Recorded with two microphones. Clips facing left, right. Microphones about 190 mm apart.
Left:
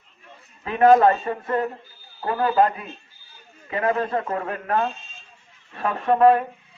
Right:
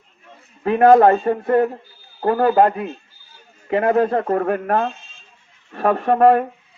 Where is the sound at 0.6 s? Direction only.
60° right (ahead or behind).